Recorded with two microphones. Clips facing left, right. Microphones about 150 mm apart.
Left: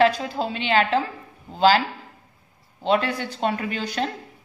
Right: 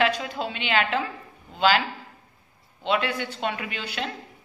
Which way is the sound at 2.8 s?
35° left (ahead or behind).